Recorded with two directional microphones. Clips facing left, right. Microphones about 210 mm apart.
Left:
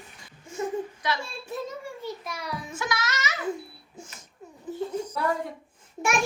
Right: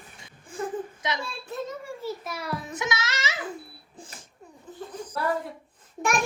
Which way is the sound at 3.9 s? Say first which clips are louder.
Left 1 dB; 35° right (ahead or behind).